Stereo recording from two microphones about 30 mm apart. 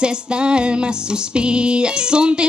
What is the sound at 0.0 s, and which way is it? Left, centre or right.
Music, right.